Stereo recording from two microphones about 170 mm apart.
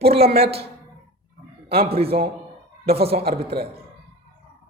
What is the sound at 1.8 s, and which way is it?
Speech, 35° right (ahead or behind).